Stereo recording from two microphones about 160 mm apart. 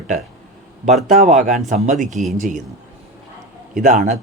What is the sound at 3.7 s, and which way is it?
Speech, 55° right (ahead or behind).